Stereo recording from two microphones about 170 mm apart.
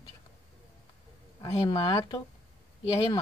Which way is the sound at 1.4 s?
30° left (ahead or behind).